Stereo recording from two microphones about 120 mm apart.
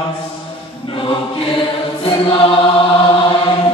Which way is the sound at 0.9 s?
45° left (ahead or behind).